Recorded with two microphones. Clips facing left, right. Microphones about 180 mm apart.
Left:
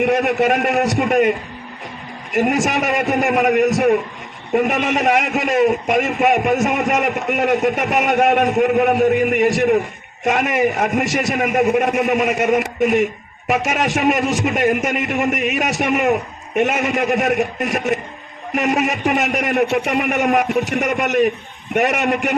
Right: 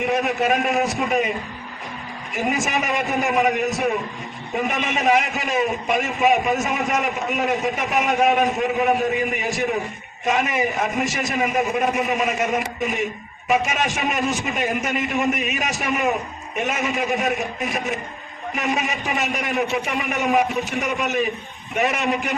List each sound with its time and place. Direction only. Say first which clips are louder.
0.0 s a man's voice: left 5 dB; 70° left (ahead or behind)
2.3 s a man's voice: left 6 dB; 70° left (ahead or behind)